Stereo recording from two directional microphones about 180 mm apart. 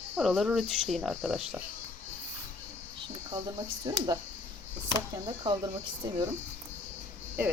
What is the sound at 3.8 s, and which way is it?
Speech, 20° right (ahead or behind).